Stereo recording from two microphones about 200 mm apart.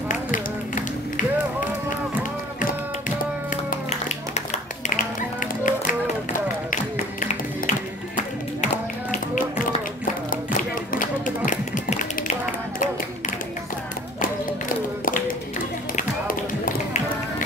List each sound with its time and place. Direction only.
0.1 s a sound: 40° left (ahead or behind)
3.7 s music: 35° left (ahead or behind)
9.1 s music: 40° left (ahead or behind)
10.3 s tap: 45° left (ahead or behind)
15.0 s clapping: 45° left (ahead or behind)
16.0 s tap: 40° left (ahead or behind)